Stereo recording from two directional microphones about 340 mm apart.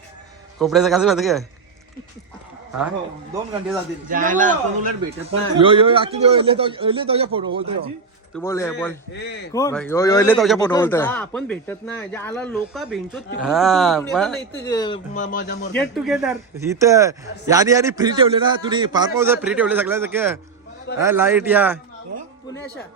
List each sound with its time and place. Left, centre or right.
0.6 s speech: centre
4.1 s a man's voice: right
8.3 s a man's voice: centre
9.1 s speech: left
9.5 s a man's voice: centre
15.7 s speech: centre